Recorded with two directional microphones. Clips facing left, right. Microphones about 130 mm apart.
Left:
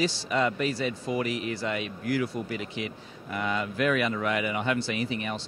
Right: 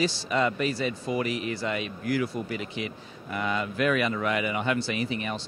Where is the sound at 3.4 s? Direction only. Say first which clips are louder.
Right 1 dB; 25° right (ahead or behind).